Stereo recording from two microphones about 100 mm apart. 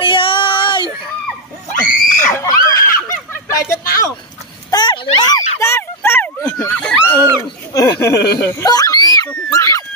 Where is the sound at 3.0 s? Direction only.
30° left (ahead or behind).